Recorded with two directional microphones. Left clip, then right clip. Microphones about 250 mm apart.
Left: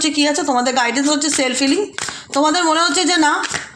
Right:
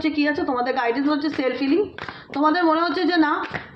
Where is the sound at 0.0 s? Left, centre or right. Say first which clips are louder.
Left 5 dB; left.